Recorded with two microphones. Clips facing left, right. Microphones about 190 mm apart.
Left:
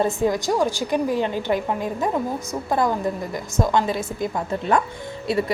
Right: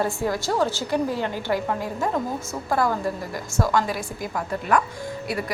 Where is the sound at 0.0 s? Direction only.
20° left (ahead or behind).